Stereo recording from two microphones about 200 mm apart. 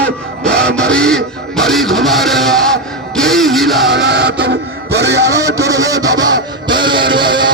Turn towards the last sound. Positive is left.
turn(degrees=-25)  # may be behind; listen again after turning